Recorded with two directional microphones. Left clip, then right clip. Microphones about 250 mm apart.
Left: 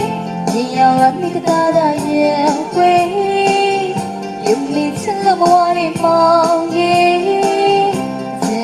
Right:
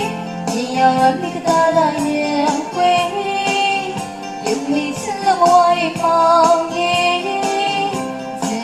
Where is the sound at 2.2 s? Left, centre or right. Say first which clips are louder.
Left 7 dB; left.